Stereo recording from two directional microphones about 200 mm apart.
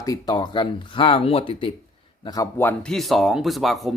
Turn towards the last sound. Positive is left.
turn(degrees=0)  # may be behind; listen again after turning